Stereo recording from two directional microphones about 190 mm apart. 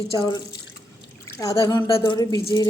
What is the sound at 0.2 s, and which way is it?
Speech, 20° left (ahead or behind).